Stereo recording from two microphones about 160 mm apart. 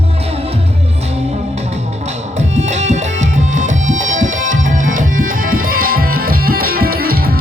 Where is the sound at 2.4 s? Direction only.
45° right (ahead or behind).